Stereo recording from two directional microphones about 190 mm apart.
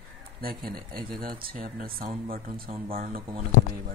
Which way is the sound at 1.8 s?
50° right (ahead or behind).